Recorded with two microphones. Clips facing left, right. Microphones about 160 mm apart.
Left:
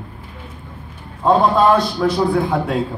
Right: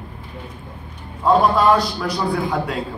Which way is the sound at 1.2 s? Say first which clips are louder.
Left 2 dB; 25° left (ahead or behind).